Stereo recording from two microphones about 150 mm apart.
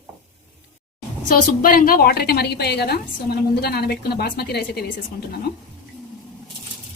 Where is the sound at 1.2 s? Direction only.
65° left (ahead or behind); by 4.8 s 90° left.